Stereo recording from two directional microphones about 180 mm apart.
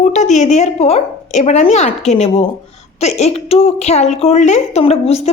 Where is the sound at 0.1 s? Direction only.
40° left (ahead or behind).